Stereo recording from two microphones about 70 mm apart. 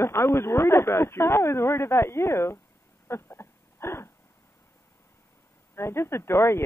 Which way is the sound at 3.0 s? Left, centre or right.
Left.